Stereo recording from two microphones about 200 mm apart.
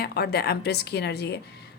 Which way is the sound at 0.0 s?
55° left (ahead or behind).